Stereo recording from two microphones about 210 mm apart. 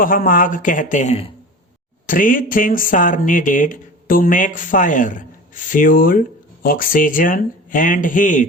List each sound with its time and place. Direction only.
0.0 s speech: 40° left (ahead or behind)